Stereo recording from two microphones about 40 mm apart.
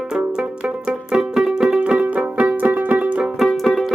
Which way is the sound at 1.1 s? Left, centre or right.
Centre.